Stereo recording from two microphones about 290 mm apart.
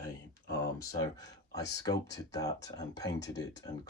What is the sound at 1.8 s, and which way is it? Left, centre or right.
Speech, centre.